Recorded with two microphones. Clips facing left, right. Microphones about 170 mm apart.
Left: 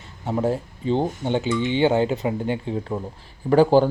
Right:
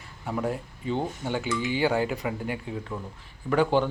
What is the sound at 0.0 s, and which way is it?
Speech, 25° left (ahead or behind).